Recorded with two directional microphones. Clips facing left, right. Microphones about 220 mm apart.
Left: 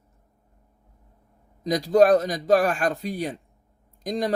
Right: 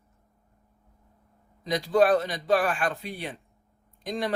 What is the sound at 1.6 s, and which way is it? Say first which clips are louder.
A man's voice: left 4 dB; 40° left (ahead or behind).